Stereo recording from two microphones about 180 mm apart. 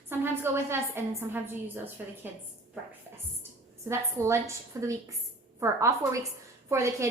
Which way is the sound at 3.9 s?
15° right (ahead or behind).